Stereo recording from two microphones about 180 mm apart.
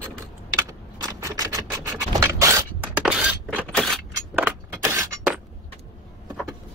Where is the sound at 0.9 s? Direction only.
20° right (ahead or behind).